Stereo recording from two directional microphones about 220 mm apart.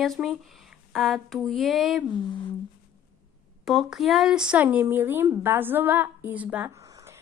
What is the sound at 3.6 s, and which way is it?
Speech, centre (ahead or behind).